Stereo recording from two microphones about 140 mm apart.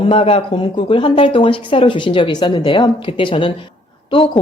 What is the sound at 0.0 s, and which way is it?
Speech, 45° left (ahead or behind).